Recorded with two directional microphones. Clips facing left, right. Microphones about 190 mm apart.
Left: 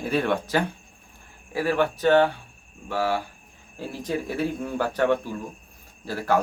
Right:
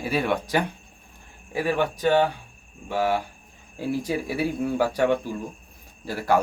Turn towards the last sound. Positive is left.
turn(degrees=-15)  # may be behind; listen again after turning